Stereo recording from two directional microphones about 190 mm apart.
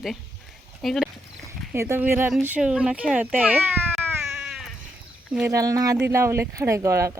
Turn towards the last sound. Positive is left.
turn(degrees=-15)  # may be behind; listen again after turning